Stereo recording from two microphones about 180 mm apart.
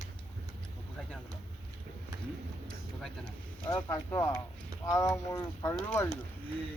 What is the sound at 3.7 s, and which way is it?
Speech, 15° left (ahead or behind).